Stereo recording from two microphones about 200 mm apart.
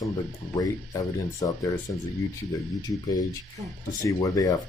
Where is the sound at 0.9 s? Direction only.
15° left (ahead or behind).